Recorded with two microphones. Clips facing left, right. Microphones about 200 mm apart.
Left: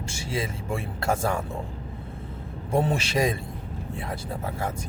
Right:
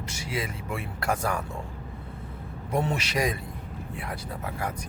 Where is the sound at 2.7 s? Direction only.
30° left (ahead or behind).